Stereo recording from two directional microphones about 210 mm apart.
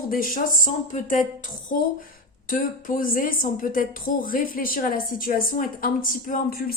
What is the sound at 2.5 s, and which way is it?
A woman's voice, 40° left (ahead or behind).